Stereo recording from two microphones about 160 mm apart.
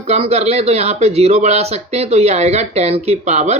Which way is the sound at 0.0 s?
40° right (ahead or behind).